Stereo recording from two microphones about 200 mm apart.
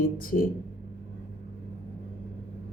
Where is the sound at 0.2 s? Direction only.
45° left (ahead or behind).